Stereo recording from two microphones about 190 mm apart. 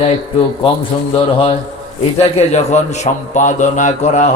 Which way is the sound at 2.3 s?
35° left (ahead or behind).